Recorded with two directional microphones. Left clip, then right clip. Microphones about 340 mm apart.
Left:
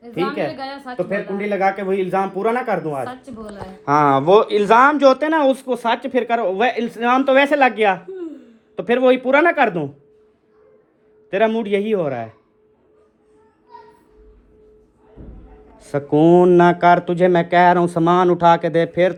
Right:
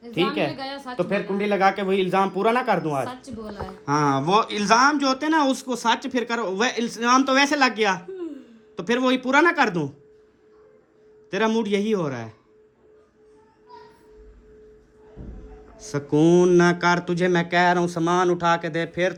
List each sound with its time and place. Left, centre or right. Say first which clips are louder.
0.5 s a woman's voice: left 3 dB; centre
11.3 s speech: left 5 dB; centre
15.8 s speech: left 5 dB; centre